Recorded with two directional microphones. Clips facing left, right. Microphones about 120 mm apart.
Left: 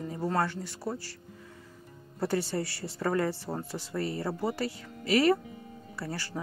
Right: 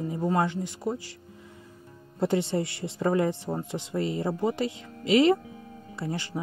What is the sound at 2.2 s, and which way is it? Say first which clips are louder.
Speech: right 4 dB; 20° right (ahead or behind).